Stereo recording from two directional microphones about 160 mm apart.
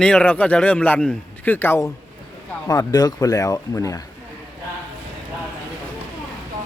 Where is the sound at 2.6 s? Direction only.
25° left (ahead or behind).